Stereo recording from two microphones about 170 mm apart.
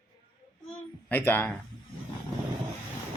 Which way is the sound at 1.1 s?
10° left (ahead or behind).